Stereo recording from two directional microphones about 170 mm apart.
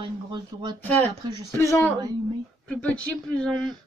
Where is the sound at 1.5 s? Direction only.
15° left (ahead or behind).